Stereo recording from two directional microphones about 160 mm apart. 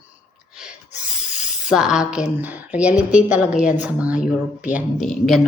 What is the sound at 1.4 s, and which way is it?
Speech, 5° right (ahead or behind).